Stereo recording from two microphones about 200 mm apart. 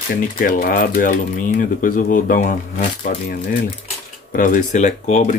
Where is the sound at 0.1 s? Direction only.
45° left (ahead or behind).